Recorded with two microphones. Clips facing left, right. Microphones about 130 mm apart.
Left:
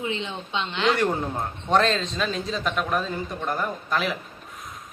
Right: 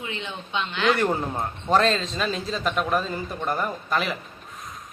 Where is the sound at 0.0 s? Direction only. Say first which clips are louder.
Left 4 dB; 25° left (ahead or behind).